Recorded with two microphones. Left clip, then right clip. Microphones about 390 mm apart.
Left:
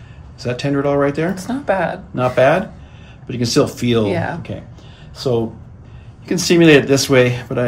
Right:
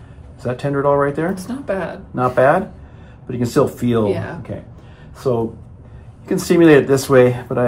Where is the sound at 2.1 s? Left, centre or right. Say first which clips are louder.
Even; centre.